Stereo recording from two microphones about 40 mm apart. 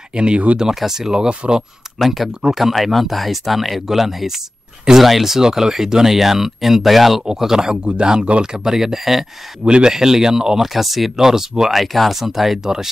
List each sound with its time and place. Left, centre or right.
0.1 s speech: right
0.7 s speech: centre
2.0 s speech: centre
11.8 s speech: centre